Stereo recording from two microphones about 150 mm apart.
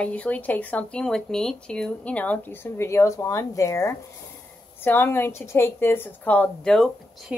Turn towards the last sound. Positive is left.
turn(degrees=0)  # may be behind; listen again after turning